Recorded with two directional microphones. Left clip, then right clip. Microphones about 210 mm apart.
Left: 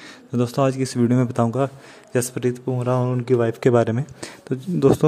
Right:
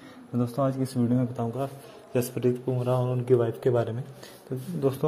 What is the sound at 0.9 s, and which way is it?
Speech, 45° left (ahead or behind).